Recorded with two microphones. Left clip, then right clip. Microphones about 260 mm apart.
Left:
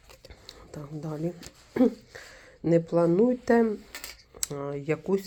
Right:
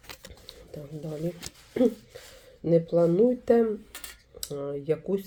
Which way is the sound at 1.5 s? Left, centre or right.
Right.